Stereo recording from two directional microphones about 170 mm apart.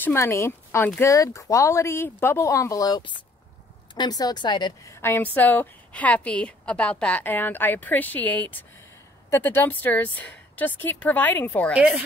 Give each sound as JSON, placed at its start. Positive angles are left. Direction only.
{"t": 0.0, "sound": "a woman's voice", "side_deg": 15}
{"t": 5.0, "sound": "a woman's voice", "side_deg": 10}
{"t": 11.7, "sound": "speech", "side_deg": -10}